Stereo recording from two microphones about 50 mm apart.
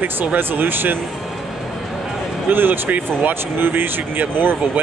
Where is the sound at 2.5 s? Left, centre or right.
Right.